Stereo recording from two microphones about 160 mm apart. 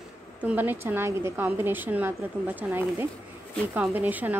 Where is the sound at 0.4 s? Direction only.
10° right (ahead or behind).